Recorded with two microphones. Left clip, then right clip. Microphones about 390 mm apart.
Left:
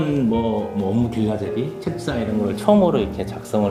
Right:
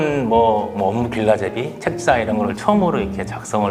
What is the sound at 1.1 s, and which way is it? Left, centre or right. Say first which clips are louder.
Speech: right 6 dB; right.